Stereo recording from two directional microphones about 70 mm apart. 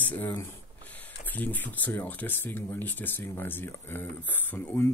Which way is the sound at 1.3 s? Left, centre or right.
Left.